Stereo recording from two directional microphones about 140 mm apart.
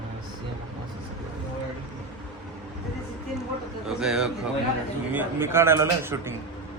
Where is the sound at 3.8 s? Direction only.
5° right (ahead or behind).